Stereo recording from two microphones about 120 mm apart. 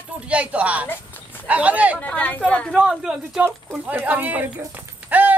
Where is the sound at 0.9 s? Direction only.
15° left (ahead or behind).